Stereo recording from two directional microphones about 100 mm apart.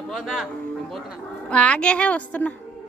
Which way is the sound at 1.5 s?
10° left (ahead or behind).